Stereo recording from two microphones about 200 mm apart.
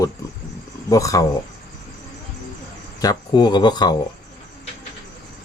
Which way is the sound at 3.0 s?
20° left (ahead or behind).